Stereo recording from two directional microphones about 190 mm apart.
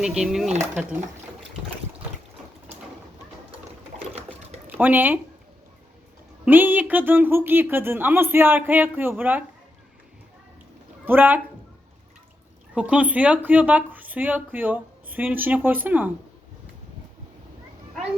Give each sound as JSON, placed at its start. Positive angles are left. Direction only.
{"t": 0.0, "sound": "speech", "side_deg": -5}
{"t": 0.5, "sound": "speech", "side_deg": -40}
{"t": 4.7, "sound": "speech", "side_deg": -10}
{"t": 6.4, "sound": "a woman's voice", "side_deg": -10}
{"t": 11.0, "sound": "a woman's voice", "side_deg": -10}
{"t": 12.7, "sound": "a woman's voice", "side_deg": -5}